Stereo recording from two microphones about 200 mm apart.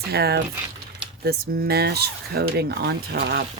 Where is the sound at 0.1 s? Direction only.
50° right (ahead or behind).